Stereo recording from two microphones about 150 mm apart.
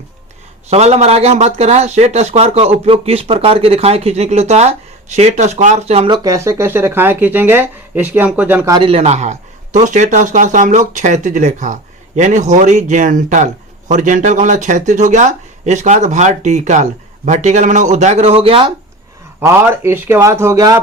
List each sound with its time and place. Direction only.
0.7 s a man's voice: 45° right (ahead or behind)
6.1 s speech: 20° right (ahead or behind)
8.7 s a man's voice: 35° right (ahead or behind)
19.4 s speech: 15° right (ahead or behind)